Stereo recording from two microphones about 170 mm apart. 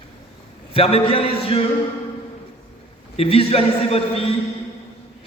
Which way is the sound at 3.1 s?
35° left (ahead or behind).